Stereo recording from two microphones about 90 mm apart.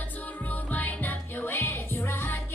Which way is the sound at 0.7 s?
20° left (ahead or behind).